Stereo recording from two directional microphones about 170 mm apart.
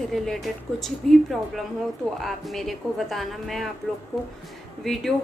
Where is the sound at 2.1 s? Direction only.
Centre (ahead or behind).